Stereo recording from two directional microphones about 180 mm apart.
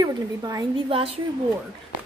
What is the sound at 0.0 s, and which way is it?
A woman's voice, 20° right (ahead or behind).